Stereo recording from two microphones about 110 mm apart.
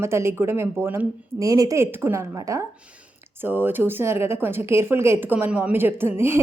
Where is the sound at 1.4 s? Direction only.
30° right (ahead or behind).